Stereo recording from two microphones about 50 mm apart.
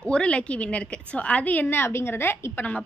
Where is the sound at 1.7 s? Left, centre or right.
Left.